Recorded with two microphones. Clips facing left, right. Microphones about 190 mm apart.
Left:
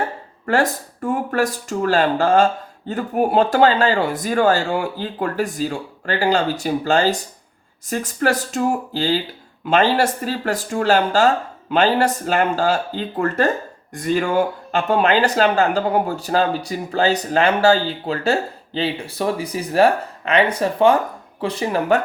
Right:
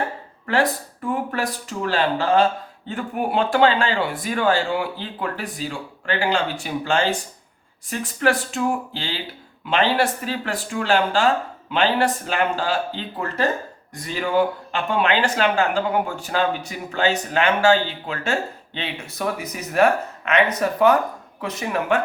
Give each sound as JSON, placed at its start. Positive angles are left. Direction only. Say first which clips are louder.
{"t": 0.4, "sound": "speech", "louder": "left 2 dB", "side_deg": 45}